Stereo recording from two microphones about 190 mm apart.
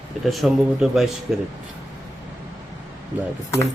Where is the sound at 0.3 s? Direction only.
Centre (ahead or behind).